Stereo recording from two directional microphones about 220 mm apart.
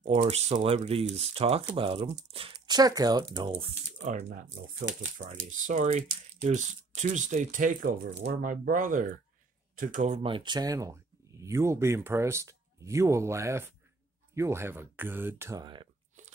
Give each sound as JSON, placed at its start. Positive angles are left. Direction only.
{"t": 0.0, "sound": "speech", "side_deg": -25}